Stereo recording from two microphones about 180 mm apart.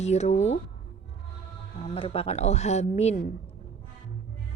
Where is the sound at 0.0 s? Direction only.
40° left (ahead or behind).